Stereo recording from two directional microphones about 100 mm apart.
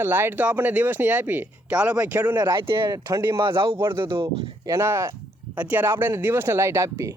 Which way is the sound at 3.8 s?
25° right (ahead or behind).